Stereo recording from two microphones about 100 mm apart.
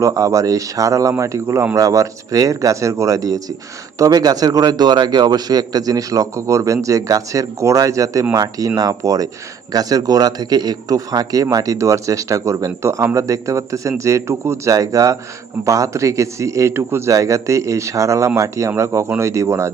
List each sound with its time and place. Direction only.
0.0 s a man's voice: 35° right (ahead or behind)